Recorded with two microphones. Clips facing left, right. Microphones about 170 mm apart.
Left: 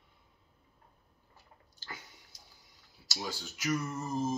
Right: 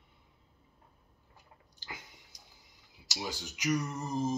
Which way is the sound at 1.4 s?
15° right (ahead or behind).